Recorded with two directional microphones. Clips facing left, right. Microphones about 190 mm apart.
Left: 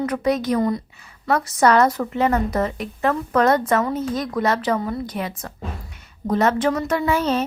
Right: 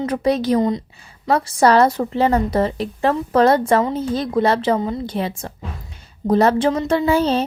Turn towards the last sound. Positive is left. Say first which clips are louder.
# right 4 dB
turn(degrees=-30)  # may be behind; listen again after turning